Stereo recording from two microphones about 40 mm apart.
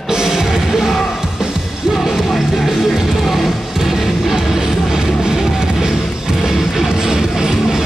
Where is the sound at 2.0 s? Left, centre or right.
Centre.